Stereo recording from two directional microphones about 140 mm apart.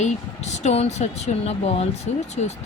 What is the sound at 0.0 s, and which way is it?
Speech, 55° left (ahead or behind).